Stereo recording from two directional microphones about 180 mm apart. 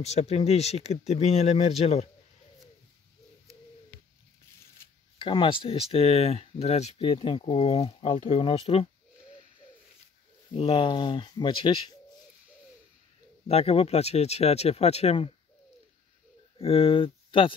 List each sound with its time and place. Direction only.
0.0 s speech: 35° left (ahead or behind)
5.2 s speech: 25° left (ahead or behind)
10.5 s speech: 30° left (ahead or behind)
13.5 s speech: 35° left (ahead or behind)
16.5 s speech: 30° left (ahead or behind)